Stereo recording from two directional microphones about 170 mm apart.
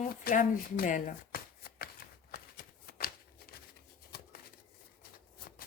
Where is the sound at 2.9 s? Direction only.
65° left (ahead or behind).